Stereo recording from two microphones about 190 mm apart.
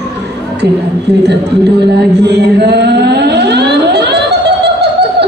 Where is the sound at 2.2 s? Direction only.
60° right (ahead or behind).